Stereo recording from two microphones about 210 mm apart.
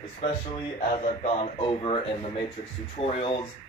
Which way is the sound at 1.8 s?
25° left (ahead or behind).